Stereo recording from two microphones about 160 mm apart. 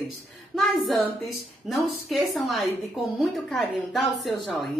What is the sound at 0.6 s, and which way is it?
A woman's voice, centre (ahead or behind).